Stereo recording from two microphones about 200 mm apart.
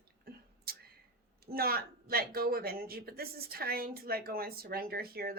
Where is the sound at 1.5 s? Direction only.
50° right (ahead or behind).